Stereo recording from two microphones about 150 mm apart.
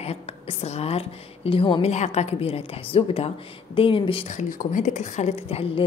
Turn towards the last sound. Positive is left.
turn(degrees=40)  # may be behind; listen again after turning